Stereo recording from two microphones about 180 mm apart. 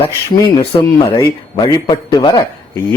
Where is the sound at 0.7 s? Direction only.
25° left (ahead or behind).